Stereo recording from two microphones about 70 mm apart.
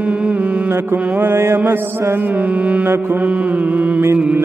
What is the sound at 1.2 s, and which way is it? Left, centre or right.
Mantra, right.